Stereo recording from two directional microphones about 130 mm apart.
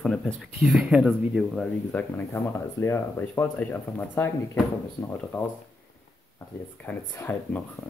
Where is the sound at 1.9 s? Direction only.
15° left (ahead or behind).